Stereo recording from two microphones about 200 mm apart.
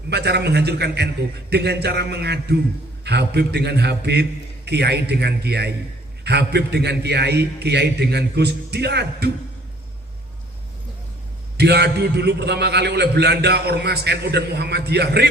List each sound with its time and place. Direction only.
0.1 s a man's voice: 55° right (ahead or behind)
11.5 s a man's voice: 55° right (ahead or behind)